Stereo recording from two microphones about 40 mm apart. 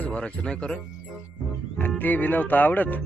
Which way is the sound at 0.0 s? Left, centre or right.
Left.